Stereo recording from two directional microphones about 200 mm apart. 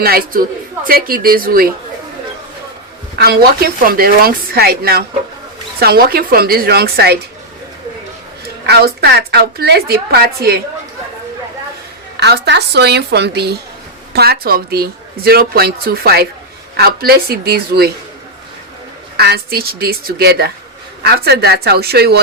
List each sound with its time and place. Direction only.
0.0 s speech: 50° right (ahead or behind)
3.2 s speech: 50° right (ahead or behind)
8.6 s speech: 55° right (ahead or behind)
12.2 s a woman's voice: 55° right (ahead or behind)
19.1 s speech: 55° right (ahead or behind)